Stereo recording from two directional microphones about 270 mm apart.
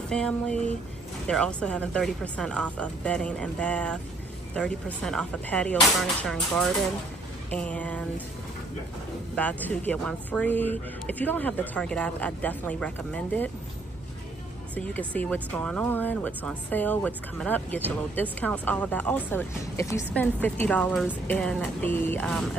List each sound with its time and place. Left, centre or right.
0.1 s speech: centre
9.3 s speech: centre
14.8 s speech: centre